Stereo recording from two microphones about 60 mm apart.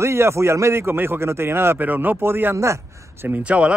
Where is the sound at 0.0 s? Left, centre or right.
Right.